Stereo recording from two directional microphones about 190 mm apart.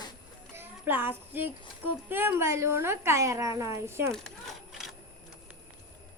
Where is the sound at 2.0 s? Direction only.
10° right (ahead or behind).